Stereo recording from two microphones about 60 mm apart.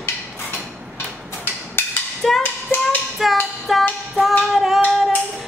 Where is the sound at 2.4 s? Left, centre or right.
Left.